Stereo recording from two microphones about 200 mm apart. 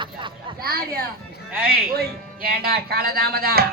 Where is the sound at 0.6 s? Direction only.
50° right (ahead or behind).